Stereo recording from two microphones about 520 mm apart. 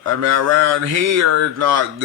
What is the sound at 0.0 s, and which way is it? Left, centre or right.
Speech, right.